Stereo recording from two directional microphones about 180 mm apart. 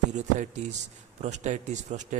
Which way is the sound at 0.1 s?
40° right (ahead or behind).